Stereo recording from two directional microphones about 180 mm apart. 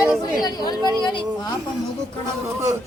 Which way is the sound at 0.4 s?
20° left (ahead or behind).